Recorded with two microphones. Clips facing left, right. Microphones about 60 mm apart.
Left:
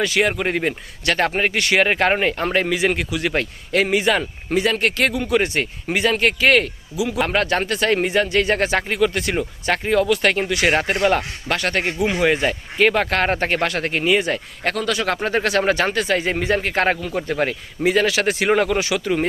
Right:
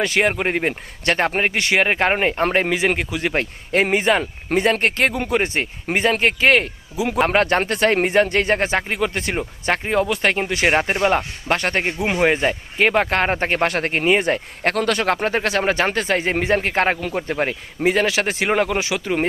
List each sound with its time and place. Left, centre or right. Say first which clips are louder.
0.0 s speech: even; right
6.9 s speech: right 3 dB; right
8.5 s speech: left 1 dB; right
11.4 s speech: right 1 dB; right
15.0 s speech: right 1 dB; right